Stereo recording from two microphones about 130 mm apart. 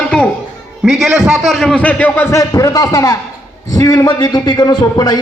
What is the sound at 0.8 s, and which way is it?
A man's voice, 5° right (ahead or behind).